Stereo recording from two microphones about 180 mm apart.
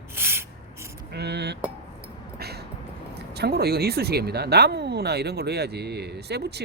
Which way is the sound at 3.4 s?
60° right (ahead or behind).